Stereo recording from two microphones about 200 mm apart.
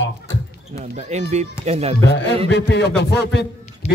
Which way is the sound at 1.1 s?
35° right (ahead or behind).